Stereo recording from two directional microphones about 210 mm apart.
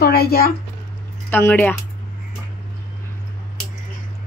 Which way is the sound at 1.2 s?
10° left (ahead or behind).